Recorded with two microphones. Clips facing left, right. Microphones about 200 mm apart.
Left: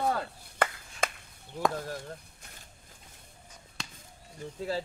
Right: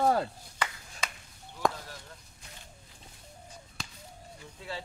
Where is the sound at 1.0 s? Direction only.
50° left (ahead or behind).